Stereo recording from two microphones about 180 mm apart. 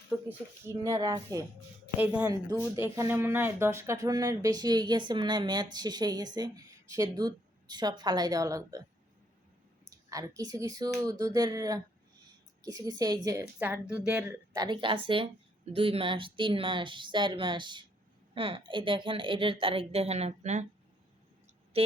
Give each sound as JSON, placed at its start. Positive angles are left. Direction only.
{"t": 0.3, "sound": "speech", "side_deg": -15}
{"t": 10.1, "sound": "speech", "side_deg": -20}
{"t": 14.5, "sound": "speech", "side_deg": -25}